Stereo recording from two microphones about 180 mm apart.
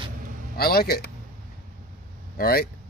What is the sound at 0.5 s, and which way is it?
Speech, 60° left (ahead or behind).